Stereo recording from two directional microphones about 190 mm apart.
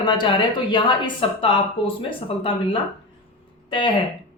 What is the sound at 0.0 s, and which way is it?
Speech, 25° left (ahead or behind).